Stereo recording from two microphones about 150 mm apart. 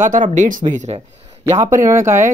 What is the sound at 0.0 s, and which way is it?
Speech, 60° right (ahead or behind).